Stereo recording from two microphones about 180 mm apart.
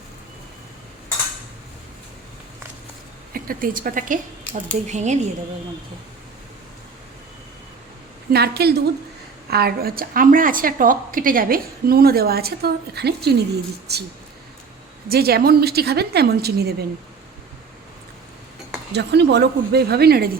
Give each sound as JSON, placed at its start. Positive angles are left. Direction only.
{"t": 3.3, "sound": "a woman's voice", "side_deg": -50}
{"t": 8.3, "sound": "a woman's voice", "side_deg": -60}
{"t": 15.1, "sound": "a woman's voice", "side_deg": -60}
{"t": 18.9, "sound": "a woman's voice", "side_deg": -70}